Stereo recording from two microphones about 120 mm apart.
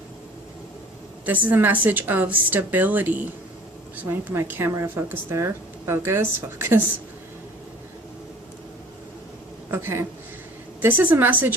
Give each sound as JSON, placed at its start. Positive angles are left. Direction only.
{"t": 1.2, "sound": "speech", "side_deg": -15}
{"t": 9.7, "sound": "speech", "side_deg": -20}